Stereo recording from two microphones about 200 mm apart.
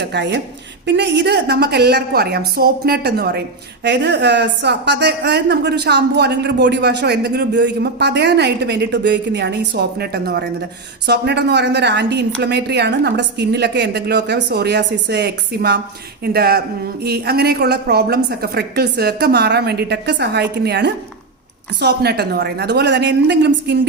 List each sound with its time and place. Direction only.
0.0 s a woman's voice: 55° right (ahead or behind)